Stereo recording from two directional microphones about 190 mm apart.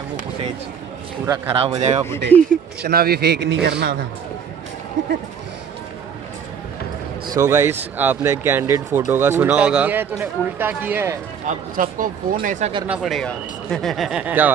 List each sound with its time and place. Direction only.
1.2 s a man's voice: 15° right (ahead or behind)
1.5 s speech: 30° right (ahead or behind)
2.8 s a man's voice: 55° right (ahead or behind)
7.3 s a man's voice: 15° right (ahead or behind)
11.4 s speech: 45° right (ahead or behind)
12.8 s speech: 5° right (ahead or behind)